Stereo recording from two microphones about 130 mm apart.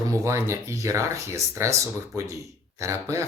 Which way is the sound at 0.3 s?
20° right (ahead or behind).